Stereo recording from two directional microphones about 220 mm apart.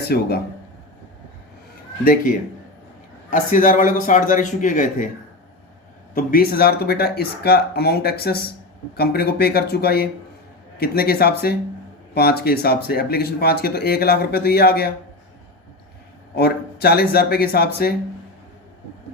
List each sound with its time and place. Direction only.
0.1 s speech: 45° left (ahead or behind)
3.2 s speech: 35° left (ahead or behind)
6.1 s speech: 40° left (ahead or behind)
16.3 s speech: 45° left (ahead or behind)